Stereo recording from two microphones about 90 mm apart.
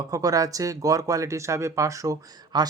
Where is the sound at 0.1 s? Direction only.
40° right (ahead or behind).